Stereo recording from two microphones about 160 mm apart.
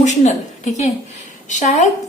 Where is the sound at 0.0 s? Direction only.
45° left (ahead or behind).